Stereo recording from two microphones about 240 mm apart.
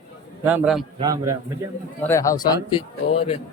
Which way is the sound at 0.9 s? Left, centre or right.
Centre.